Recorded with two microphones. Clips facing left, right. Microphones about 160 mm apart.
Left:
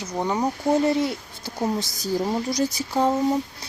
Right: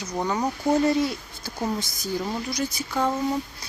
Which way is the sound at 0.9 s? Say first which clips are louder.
Left 1 dB; 25° left (ahead or behind).